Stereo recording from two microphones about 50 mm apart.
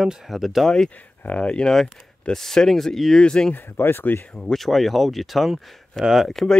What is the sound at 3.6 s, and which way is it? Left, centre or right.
Speech, left.